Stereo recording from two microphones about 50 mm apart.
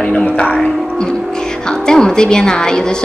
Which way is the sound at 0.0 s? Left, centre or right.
Centre.